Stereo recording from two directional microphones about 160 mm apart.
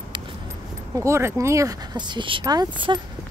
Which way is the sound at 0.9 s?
15° right (ahead or behind).